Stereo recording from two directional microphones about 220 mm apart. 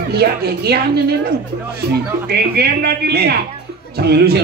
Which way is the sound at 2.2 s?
45° right (ahead or behind).